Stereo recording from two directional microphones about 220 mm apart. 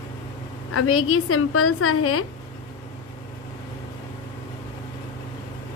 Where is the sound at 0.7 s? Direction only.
75° left (ahead or behind).